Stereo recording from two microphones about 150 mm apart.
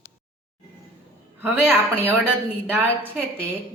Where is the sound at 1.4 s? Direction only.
10° right (ahead or behind).